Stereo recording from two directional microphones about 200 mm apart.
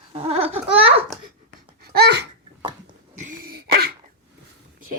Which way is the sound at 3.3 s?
45° right (ahead or behind).